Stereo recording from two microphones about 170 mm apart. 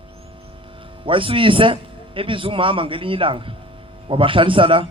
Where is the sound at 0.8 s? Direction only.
30° right (ahead or behind).